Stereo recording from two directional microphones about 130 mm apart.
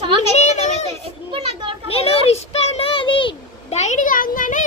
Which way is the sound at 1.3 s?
40° right (ahead or behind).